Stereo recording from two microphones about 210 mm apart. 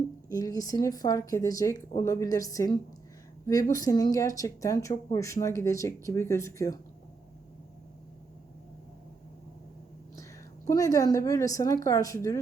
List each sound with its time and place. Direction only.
0.3 s speech: 15° left (ahead or behind)
10.7 s speech: 15° left (ahead or behind)